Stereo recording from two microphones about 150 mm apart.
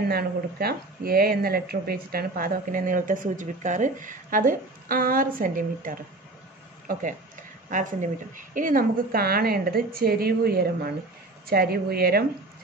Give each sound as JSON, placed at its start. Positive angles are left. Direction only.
{"t": 0.1, "sound": "a woman's voice", "side_deg": -90}